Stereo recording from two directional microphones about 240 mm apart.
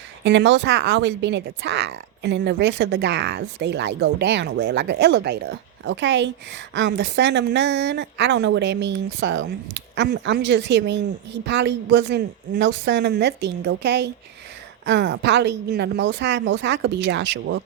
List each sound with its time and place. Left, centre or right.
0.3 s speech: right